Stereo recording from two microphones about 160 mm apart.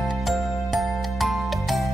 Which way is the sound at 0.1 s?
Centre (ahead or behind).